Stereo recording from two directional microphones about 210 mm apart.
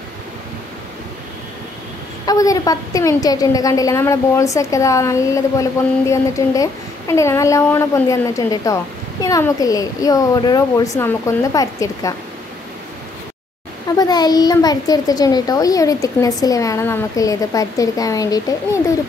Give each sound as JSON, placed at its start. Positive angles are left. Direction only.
{"t": 2.2, "sound": "a woman's voice", "side_deg": 15}
{"t": 13.9, "sound": "a woman's voice", "side_deg": 20}